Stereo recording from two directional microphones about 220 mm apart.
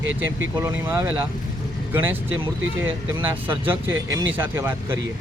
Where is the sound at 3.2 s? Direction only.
10° right (ahead or behind).